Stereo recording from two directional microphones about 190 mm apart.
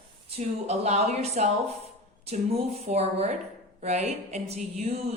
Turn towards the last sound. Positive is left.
turn(degrees=-35)  # may be behind; listen again after turning